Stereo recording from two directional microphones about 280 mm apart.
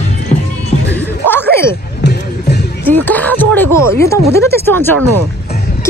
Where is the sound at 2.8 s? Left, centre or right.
Centre.